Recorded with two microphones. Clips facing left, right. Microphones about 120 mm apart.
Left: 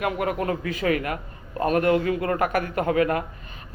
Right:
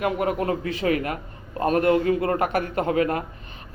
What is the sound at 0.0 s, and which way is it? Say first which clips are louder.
Speech: right 1 dB; 35° right (ahead or behind).